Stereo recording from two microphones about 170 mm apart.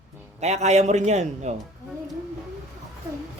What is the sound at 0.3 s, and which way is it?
A man's voice, 40° right (ahead or behind).